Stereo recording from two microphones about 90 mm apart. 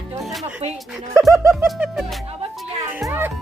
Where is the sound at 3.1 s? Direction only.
25° right (ahead or behind).